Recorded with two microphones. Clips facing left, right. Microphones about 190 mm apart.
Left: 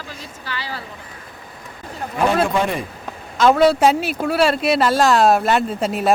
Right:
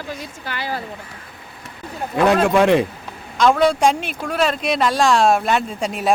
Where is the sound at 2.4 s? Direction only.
80° right.